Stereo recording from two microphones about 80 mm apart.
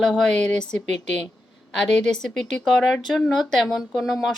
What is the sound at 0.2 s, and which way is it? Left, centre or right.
Speech, centre.